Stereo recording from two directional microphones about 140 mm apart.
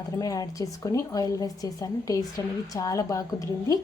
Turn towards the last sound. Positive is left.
turn(degrees=25)  # may be behind; listen again after turning